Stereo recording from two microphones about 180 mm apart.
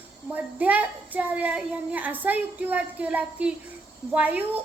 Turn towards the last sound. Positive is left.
turn(degrees=-10)  # may be behind; listen again after turning